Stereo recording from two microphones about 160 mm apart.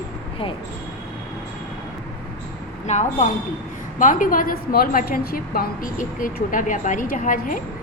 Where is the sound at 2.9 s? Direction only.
50° left (ahead or behind).